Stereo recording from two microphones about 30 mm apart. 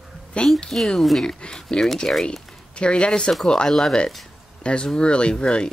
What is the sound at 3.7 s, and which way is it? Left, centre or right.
Speech, centre.